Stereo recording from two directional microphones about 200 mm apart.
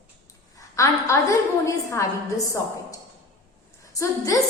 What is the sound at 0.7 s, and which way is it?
Speech, 15° left (ahead or behind).